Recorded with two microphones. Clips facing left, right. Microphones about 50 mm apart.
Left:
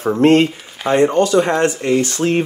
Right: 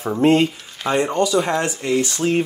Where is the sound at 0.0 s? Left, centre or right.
Left.